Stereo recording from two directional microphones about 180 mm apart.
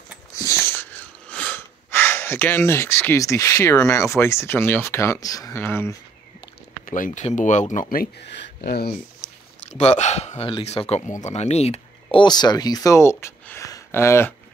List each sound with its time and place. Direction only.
0.7 s speech: 10° left (ahead or behind)
6.9 s speech: 45° left (ahead or behind)
7.9 s speech: 55° left (ahead or behind)
9.7 s speech: 40° left (ahead or behind); by 14.3 s 15° left (ahead or behind)